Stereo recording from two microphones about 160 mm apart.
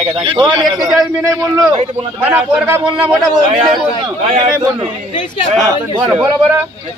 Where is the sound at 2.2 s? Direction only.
10° right (ahead or behind).